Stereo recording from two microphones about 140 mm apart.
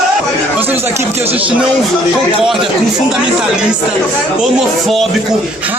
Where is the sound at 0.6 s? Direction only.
15° right (ahead or behind).